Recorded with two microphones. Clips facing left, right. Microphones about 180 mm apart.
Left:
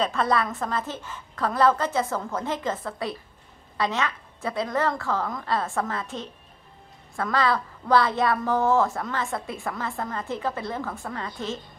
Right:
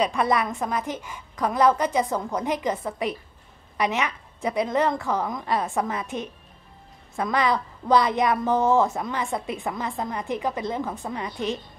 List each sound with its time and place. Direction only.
0.0 s a woman's voice: 15° right (ahead or behind)